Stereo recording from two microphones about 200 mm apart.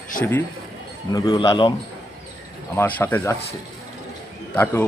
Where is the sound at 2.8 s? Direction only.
10° left (ahead or behind).